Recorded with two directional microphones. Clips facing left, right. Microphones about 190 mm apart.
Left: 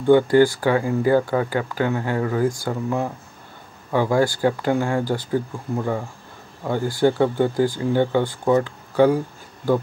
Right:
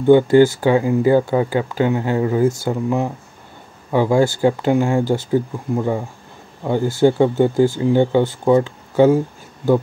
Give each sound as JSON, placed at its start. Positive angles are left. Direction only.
{"t": 0.0, "sound": "speech", "side_deg": -20}